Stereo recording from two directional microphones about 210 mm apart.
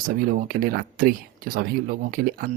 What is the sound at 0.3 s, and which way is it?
Speech, 40° right (ahead or behind).